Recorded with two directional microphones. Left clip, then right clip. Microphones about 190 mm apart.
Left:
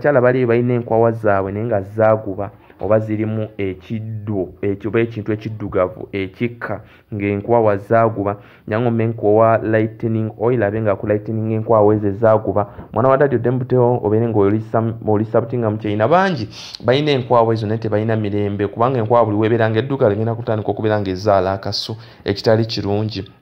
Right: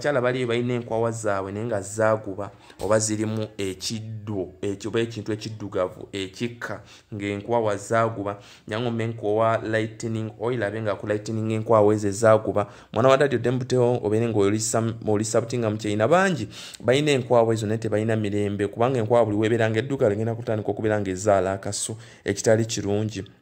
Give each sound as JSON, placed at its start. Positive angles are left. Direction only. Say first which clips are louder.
{"t": 0.0, "sound": "speech", "louder": "left 9 dB", "side_deg": -5}
{"t": 1.4, "sound": "speech", "louder": "left 8 dB", "side_deg": -10}
{"t": 5.0, "sound": "speech", "louder": "left 7 dB", "side_deg": 0}
{"t": 5.7, "sound": "speech", "louder": "left 8 dB", "side_deg": -10}
{"t": 11.4, "sound": "speech", "louder": "left 5 dB", "side_deg": -35}
{"t": 15.8, "sound": "speech", "louder": "left 5 dB", "side_deg": -25}